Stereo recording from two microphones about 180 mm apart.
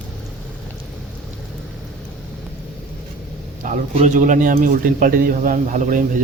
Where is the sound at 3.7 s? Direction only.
40° right (ahead or behind).